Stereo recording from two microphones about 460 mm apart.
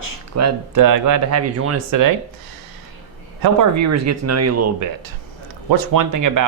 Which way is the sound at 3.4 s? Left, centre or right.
Right.